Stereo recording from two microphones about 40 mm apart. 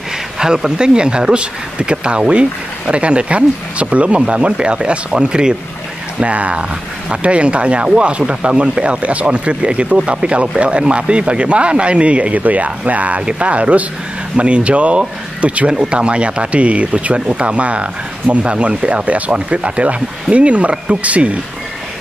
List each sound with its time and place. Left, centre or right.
0.4 s speech: centre
6.1 s speech: right